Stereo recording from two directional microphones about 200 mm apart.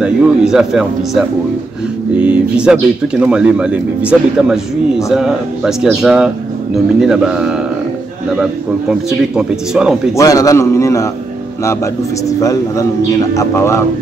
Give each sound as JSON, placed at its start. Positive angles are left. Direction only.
{"t": 0.0, "sound": "speech", "side_deg": -5}
{"t": 10.1, "sound": "a man's voice", "side_deg": 15}